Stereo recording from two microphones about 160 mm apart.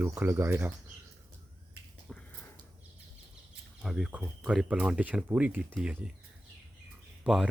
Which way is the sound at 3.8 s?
Centre (ahead or behind).